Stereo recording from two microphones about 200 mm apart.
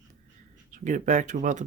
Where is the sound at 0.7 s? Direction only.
40° right (ahead or behind).